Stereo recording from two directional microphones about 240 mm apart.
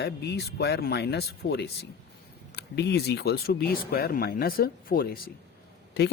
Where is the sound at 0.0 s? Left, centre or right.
Left.